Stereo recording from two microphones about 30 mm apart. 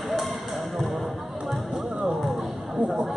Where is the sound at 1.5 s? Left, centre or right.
Centre.